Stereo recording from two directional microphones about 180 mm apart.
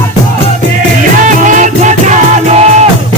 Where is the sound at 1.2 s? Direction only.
45° right (ahead or behind).